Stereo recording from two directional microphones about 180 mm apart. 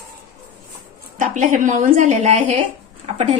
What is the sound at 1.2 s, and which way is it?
Speech, 45° right (ahead or behind).